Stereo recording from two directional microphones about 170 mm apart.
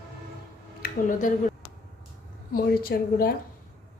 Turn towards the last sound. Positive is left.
turn(degrees=60)  # may be behind; listen again after turning